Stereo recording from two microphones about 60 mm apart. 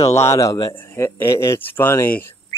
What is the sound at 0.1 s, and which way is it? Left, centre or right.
Speech, left.